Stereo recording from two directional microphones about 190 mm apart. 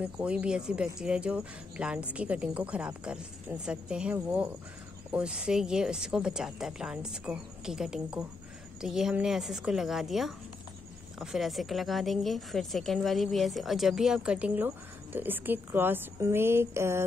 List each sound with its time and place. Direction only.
0.0 s a woman's voice: 5° right (ahead or behind)